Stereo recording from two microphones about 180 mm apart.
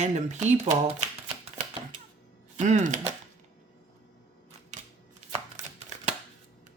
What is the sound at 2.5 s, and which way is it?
Chopping, 40° right (ahead or behind).